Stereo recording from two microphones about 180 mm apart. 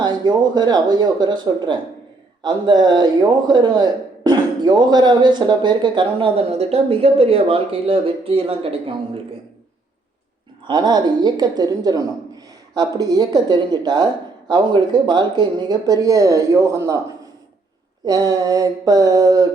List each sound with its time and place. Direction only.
0.0 s a woman's voice: 25° right (ahead or behind)
10.7 s a woman's voice: 25° right (ahead or behind)
18.0 s a woman's voice: 20° right (ahead or behind)